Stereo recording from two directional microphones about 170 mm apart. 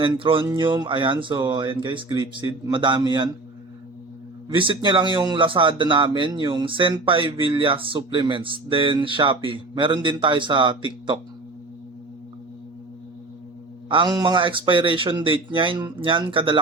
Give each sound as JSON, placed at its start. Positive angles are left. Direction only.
{"t": 0.0, "sound": "speech", "side_deg": -30}
{"t": 4.4, "sound": "speech", "side_deg": -30}
{"t": 13.9, "sound": "speech", "side_deg": -25}